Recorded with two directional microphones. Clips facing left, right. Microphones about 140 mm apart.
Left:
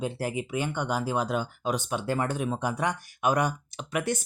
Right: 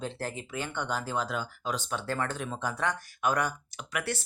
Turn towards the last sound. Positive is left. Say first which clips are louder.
# left 5 dB
turn(degrees=15)  # may be behind; listen again after turning